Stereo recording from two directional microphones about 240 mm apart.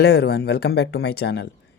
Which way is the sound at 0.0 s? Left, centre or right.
Left.